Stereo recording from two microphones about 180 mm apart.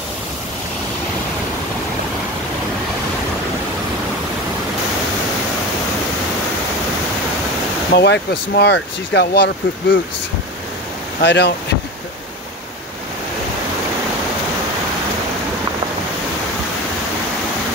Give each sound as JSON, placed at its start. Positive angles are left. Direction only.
{"t": 7.9, "sound": "speech", "side_deg": 70}
{"t": 11.2, "sound": "speech", "side_deg": 75}